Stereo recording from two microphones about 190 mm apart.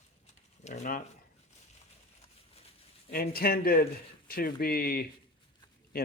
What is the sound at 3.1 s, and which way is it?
Speech, 50° left (ahead or behind).